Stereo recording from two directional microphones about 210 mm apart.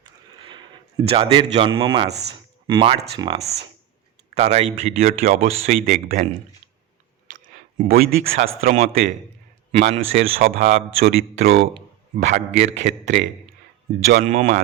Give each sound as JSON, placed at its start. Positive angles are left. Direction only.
{"t": 0.0, "sound": "a sound", "side_deg": -20}
{"t": 3.2, "sound": "a man's voice", "side_deg": -25}
{"t": 5.5, "sound": "a man's voice", "side_deg": -30}
{"t": 5.8, "sound": "speech", "side_deg": -45}
{"t": 7.3, "sound": "a sound", "side_deg": -40}
{"t": 7.8, "sound": "a man's voice", "side_deg": -40}